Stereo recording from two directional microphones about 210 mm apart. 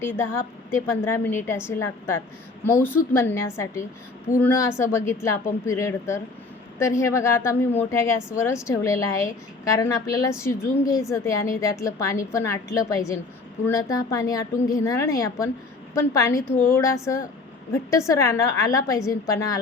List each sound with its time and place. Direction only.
0.0 s a woman's voice: 10° left (ahead or behind)